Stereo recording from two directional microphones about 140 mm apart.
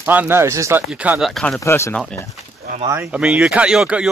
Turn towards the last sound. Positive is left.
turn(degrees=-5)  # may be behind; listen again after turning